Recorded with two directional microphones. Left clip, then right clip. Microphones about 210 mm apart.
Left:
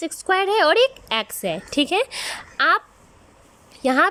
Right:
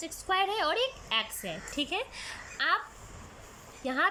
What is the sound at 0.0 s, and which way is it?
A woman's voice, 55° left (ahead or behind).